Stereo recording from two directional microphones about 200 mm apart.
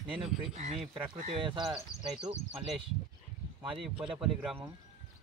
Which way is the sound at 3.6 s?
25° right (ahead or behind).